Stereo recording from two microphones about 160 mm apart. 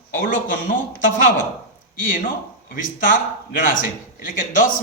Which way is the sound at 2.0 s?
60° left (ahead or behind).